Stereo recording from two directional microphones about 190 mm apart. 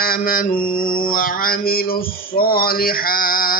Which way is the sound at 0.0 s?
50° left (ahead or behind).